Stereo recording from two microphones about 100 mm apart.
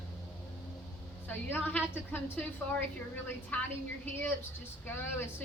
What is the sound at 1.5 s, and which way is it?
A woman's voice, 20° left (ahead or behind).